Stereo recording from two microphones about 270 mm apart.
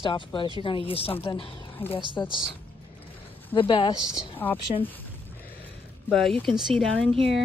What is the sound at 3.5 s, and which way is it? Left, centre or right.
A woman's voice, centre.